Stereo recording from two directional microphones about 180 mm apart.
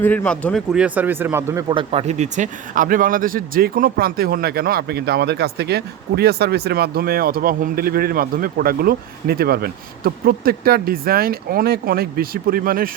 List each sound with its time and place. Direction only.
0.0 s speech: 10° left (ahead or behind); by 1.6 s 15° right (ahead or behind)
1.7 s speech: 30° right (ahead or behind); by 12.9 s 55° right (ahead or behind)